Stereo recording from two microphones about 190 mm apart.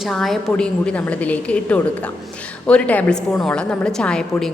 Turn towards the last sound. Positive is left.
turn(degrees=5)  # may be behind; listen again after turning